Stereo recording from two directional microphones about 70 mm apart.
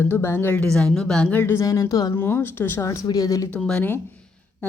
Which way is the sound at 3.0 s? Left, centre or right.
Left.